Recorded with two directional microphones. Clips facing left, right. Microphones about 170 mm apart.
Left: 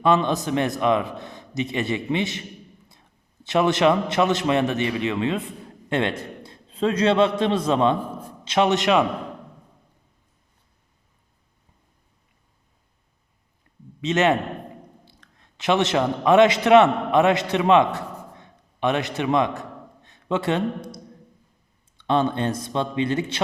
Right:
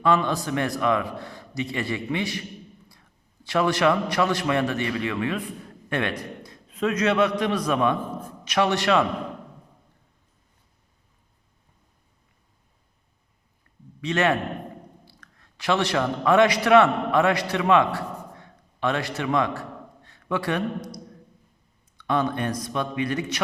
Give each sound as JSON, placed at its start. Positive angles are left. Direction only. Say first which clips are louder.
{"t": 0.0, "sound": "a man's voice", "louder": "left 2 dB", "side_deg": 20}
{"t": 14.0, "sound": "a man's voice", "louder": "left 3 dB", "side_deg": 20}